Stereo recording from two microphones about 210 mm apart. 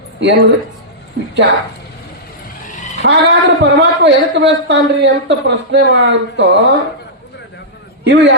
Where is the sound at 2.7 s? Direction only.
35° left (ahead or behind).